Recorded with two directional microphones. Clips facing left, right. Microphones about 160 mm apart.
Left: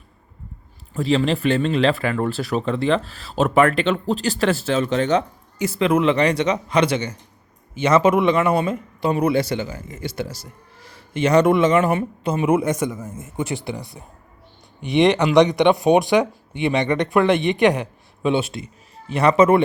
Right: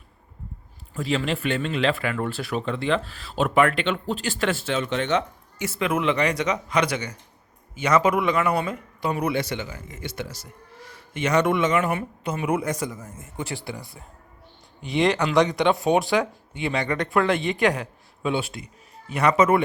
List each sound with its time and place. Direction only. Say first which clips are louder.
0.9 s a man's voice: left 6 dB; 35° left (ahead or behind)